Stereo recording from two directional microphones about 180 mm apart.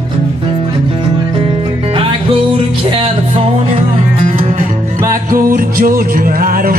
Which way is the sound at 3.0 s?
35° right (ahead or behind).